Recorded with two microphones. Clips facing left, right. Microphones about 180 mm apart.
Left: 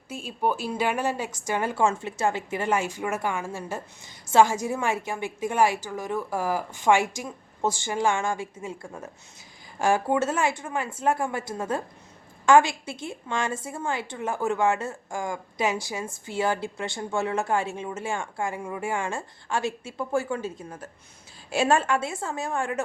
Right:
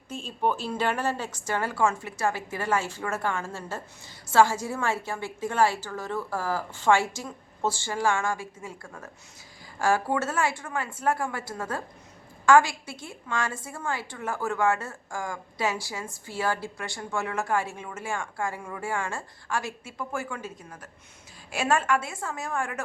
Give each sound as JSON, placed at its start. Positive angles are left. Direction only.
{"t": 0.1, "sound": "a woman's voice", "side_deg": 10}